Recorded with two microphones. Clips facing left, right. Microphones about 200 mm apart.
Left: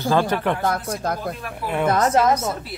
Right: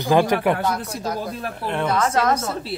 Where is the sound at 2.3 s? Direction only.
30° right (ahead or behind).